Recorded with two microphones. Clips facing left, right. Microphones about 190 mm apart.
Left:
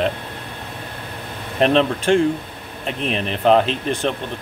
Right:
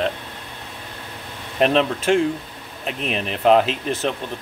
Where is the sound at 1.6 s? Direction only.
Centre (ahead or behind).